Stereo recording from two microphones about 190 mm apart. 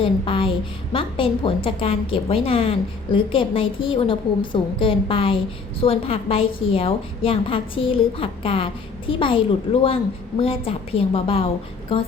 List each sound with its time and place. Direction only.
0.0 s a woman's voice: 30° left (ahead or behind)